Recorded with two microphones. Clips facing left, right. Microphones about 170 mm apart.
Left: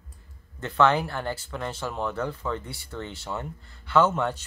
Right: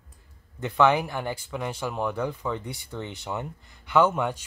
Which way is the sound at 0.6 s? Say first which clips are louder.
Right 1 dB; 15° right (ahead or behind).